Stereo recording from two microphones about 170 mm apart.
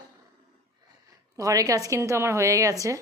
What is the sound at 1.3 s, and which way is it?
A woman's voice, 20° right (ahead or behind).